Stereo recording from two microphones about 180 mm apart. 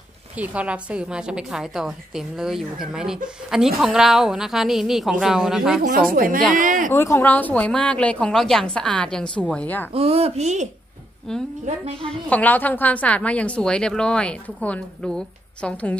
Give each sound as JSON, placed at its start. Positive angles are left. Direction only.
{"t": 0.4, "sound": "a woman's voice", "side_deg": -5}
{"t": 5.8, "sound": "speech", "side_deg": -50}
{"t": 6.9, "sound": "a woman's voice", "side_deg": 15}
{"t": 9.9, "sound": "speech", "side_deg": -35}
{"t": 12.1, "sound": "a woman's voice", "side_deg": 10}